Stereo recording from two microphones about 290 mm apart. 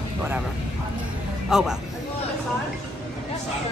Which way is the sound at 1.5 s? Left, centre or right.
Centre.